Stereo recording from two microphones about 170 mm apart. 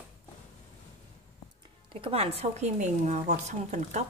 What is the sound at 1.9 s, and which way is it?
Speech, 35° right (ahead or behind).